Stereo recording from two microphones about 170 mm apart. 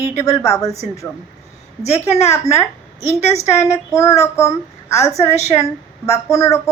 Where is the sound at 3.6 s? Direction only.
15° left (ahead or behind).